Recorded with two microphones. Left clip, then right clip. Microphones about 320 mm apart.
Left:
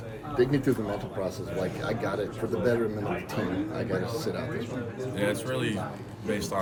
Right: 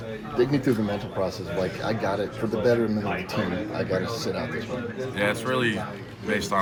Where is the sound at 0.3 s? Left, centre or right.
Right.